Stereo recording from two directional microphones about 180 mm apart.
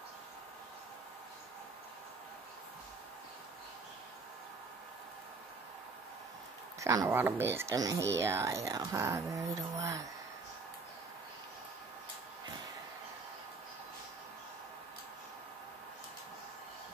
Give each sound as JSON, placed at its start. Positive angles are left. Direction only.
{"t": 6.8, "sound": "speech", "side_deg": -15}